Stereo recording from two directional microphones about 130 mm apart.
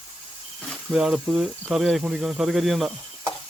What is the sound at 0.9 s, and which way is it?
Speech, 5° right (ahead or behind).